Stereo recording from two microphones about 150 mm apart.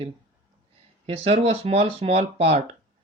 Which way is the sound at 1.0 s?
40° right (ahead or behind).